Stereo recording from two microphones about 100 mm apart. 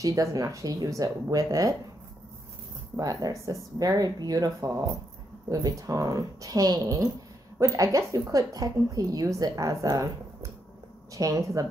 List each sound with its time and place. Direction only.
0.0 s a woman's voice: 35° right (ahead or behind)
3.0 s a woman's voice: 40° right (ahead or behind)
11.1 s a woman's voice: 35° right (ahead or behind)